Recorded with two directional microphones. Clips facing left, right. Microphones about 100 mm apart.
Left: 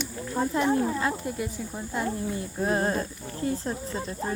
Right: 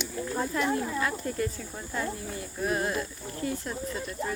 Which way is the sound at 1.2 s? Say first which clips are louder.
Even; 15° left (ahead or behind).